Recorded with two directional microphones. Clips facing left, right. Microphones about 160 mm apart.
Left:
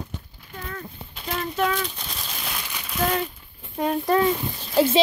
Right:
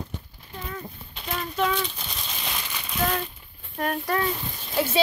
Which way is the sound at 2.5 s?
10° left (ahead or behind).